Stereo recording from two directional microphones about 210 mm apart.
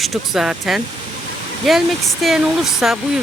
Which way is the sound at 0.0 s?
Centre (ahead or behind).